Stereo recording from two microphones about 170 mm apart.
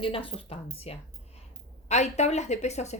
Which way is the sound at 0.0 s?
30° left (ahead or behind).